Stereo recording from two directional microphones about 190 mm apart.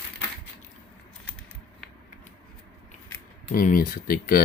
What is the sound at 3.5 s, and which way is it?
Speech, 45° left (ahead or behind).